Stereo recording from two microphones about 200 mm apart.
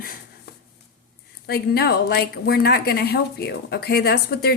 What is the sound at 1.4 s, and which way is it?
A woman's voice, 55° left (ahead or behind).